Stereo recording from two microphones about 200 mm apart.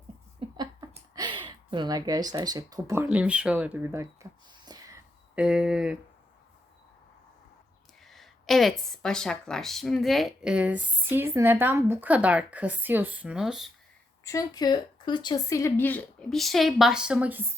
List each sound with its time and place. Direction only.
0.3 s a sound: 20° right (ahead or behind)
5.3 s speech: 5° right (ahead or behind)
8.0 s speech: centre (ahead or behind)
14.3 s speech: 20° left (ahead or behind); by 17.6 s 10° right (ahead or behind)